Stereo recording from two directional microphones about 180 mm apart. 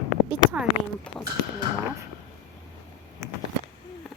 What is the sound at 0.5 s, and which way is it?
Speech, 5° right (ahead or behind).